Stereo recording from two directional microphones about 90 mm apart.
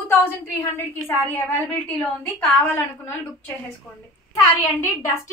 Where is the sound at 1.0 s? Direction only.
20° left (ahead or behind).